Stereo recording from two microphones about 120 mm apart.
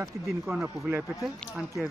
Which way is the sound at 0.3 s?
5° right (ahead or behind).